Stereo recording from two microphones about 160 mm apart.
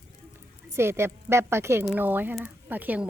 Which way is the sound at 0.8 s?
15° right (ahead or behind).